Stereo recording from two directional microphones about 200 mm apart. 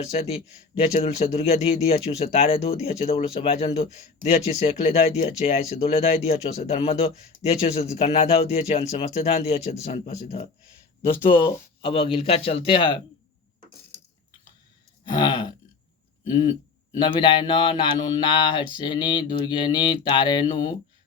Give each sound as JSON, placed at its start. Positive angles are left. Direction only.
{"t": 0.1, "sound": "speech", "side_deg": 30}
{"t": 15.0, "sound": "a sound", "side_deg": 20}
{"t": 16.3, "sound": "speech", "side_deg": 25}